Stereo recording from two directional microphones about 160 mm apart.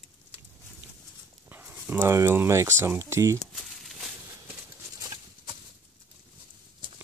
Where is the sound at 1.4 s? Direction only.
15° right (ahead or behind).